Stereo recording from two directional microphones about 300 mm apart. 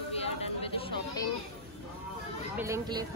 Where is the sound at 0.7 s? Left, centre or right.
Centre.